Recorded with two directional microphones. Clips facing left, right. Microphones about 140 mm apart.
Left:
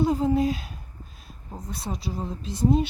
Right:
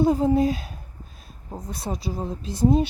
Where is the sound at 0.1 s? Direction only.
35° right (ahead or behind).